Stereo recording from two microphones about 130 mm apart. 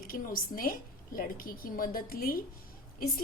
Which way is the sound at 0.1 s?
90° left.